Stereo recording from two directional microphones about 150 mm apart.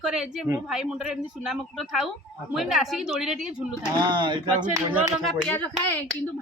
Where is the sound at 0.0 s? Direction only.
Centre (ahead or behind).